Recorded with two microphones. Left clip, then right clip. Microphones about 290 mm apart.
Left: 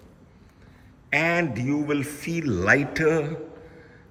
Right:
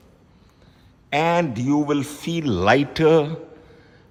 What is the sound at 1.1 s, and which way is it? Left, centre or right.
A man's voice, centre.